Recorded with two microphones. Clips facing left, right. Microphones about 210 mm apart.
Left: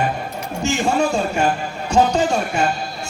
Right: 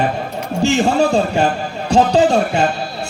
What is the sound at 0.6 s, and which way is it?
A man's voice, 35° right (ahead or behind).